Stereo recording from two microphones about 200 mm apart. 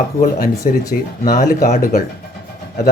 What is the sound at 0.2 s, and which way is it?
Speech, 45° left (ahead or behind).